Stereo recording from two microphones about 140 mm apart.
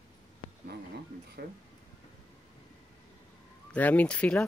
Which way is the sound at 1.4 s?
90° right.